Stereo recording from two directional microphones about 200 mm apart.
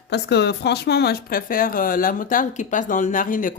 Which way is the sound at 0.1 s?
55° left (ahead or behind).